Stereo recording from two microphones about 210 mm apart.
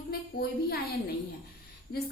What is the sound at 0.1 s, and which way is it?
Speech, 50° left (ahead or behind).